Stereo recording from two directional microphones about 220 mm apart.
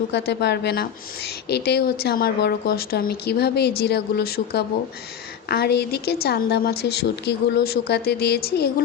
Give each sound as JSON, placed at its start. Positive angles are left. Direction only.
{"t": 0.1, "sound": "a woman's voice", "side_deg": 50}